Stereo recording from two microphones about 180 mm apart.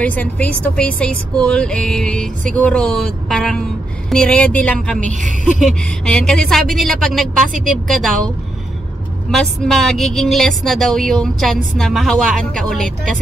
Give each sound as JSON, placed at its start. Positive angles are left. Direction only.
{"t": 0.0, "sound": "a woman's voice", "side_deg": 10}
{"t": 7.4, "sound": "speech", "side_deg": -45}
{"t": 9.3, "sound": "a woman's voice", "side_deg": 5}